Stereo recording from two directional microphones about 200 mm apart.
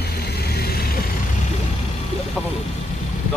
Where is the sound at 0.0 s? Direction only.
50° left (ahead or behind).